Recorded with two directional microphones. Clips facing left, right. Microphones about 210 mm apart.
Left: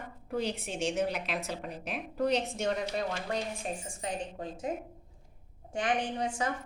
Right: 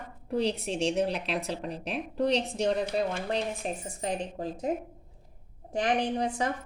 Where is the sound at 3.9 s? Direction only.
35° right (ahead or behind).